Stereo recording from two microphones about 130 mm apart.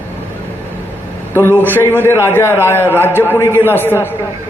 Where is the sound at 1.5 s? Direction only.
15° left (ahead or behind).